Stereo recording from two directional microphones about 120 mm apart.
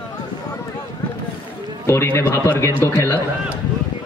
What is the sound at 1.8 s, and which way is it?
A man's voice, 20° left (ahead or behind).